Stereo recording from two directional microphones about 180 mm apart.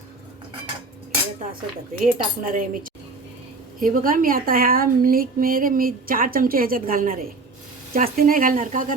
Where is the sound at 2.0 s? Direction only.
50° right (ahead or behind).